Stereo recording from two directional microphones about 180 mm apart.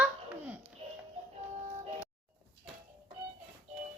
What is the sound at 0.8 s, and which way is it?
Music, 35° right (ahead or behind).